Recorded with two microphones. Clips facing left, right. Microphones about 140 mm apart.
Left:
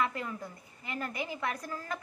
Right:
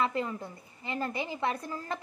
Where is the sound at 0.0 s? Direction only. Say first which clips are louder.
Right 3 dB; 25° right (ahead or behind).